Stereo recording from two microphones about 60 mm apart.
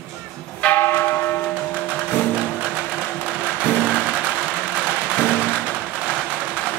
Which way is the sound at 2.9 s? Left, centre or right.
Centre.